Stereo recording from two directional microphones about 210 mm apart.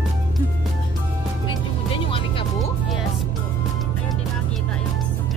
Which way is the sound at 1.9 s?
25° left (ahead or behind).